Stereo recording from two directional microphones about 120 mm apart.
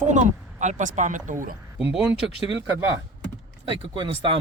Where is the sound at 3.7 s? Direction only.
45° right (ahead or behind).